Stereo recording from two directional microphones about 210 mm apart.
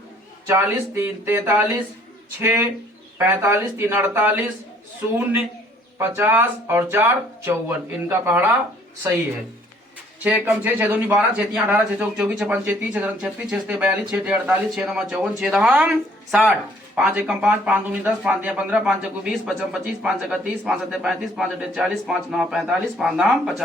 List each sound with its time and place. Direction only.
0.4 s speech: 10° right (ahead or behind)
10.2 s speech: 10° right (ahead or behind)